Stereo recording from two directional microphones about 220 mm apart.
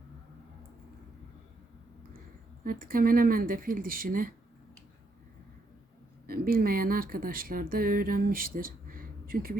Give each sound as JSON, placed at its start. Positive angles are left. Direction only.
{"t": 2.6, "sound": "speech", "side_deg": -40}
{"t": 6.2, "sound": "speech", "side_deg": -40}